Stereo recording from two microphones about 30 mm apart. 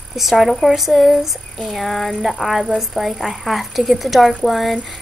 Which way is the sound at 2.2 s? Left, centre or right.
Centre.